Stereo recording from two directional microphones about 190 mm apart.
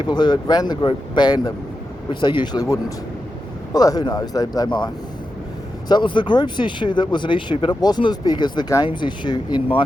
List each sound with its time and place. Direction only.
0.0 s speech: 20° left (ahead or behind)
5.9 s speech: 25° left (ahead or behind)